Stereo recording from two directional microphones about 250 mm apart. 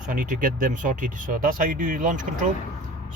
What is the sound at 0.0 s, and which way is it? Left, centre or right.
Speech, right.